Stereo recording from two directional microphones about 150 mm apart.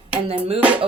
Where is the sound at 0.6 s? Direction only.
10° right (ahead or behind).